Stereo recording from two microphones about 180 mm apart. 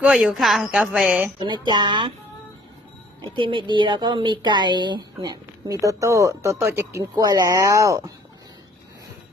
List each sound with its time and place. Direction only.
0.0 s a woman's voice: centre (ahead or behind)
1.4 s speech: 25° right (ahead or behind)
3.3 s speech: 30° right (ahead or behind)